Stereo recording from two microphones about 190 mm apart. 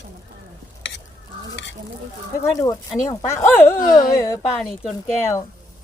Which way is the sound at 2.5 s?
20° left (ahead or behind).